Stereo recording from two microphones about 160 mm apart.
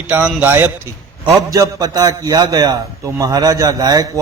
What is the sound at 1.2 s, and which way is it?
A man's voice, 25° right (ahead or behind).